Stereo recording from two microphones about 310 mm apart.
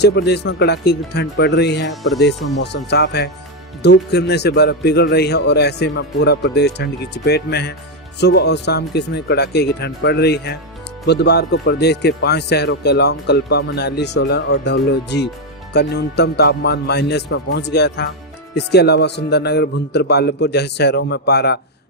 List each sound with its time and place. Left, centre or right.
0.0 s speech: left
1.9 s speech: centre
2.6 s speech: left